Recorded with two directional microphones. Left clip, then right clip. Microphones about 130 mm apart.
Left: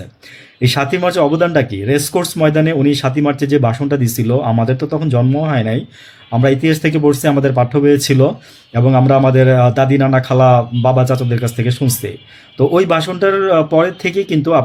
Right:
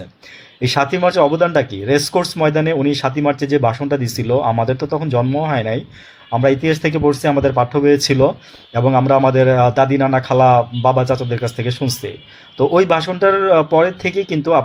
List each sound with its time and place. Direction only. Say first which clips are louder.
0.6 s speech: even; 30° left (ahead or behind)